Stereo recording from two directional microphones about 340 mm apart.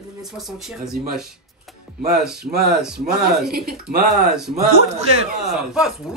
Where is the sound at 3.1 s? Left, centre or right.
Right.